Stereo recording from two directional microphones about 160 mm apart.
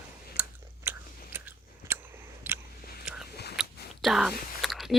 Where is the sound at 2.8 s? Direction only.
75° left (ahead or behind).